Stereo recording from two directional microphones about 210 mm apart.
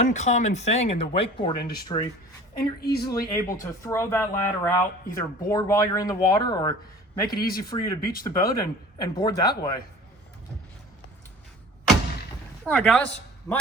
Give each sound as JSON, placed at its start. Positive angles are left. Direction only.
{"t": 0.0, "sound": "speech", "side_deg": 35}
{"t": 2.6, "sound": "a woman's voice", "side_deg": 50}
{"t": 3.0, "sound": "speech", "side_deg": 20}
{"t": 12.6, "sound": "speech", "side_deg": 5}
{"t": 13.5, "sound": "speech", "side_deg": 15}